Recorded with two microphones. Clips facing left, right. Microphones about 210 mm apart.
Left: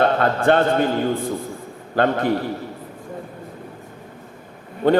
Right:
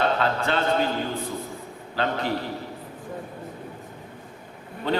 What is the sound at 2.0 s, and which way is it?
Speech, 50° left (ahead or behind).